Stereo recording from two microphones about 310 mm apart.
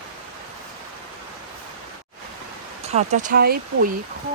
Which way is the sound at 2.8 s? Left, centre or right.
Right.